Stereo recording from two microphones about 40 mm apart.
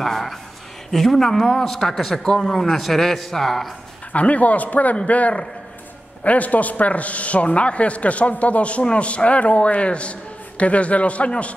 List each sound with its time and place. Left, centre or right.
0.0 s a sound: centre
0.9 s speech: centre
4.1 s a man's voice: left